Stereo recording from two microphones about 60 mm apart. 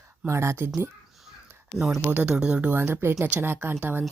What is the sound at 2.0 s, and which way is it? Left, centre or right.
Speech, right.